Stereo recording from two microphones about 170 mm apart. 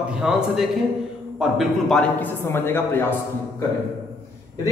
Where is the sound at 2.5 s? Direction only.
15° left (ahead or behind).